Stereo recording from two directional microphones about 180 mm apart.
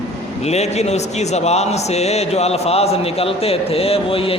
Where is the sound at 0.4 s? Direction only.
35° left (ahead or behind).